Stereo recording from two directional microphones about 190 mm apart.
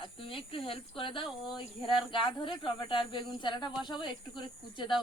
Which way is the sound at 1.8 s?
Centre (ahead or behind).